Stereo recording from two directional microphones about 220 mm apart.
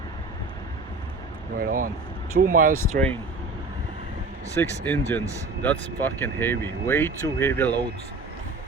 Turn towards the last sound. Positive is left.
turn(degrees=10)  # may be behind; listen again after turning